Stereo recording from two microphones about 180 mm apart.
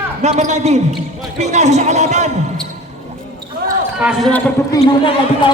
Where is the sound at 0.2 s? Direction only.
40° right (ahead or behind).